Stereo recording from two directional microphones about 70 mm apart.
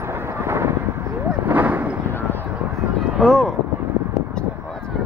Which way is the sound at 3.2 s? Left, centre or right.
Centre.